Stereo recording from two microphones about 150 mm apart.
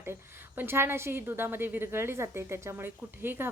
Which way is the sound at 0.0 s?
15° right (ahead or behind).